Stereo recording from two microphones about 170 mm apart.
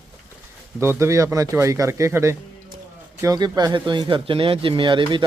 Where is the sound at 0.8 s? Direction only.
15° right (ahead or behind).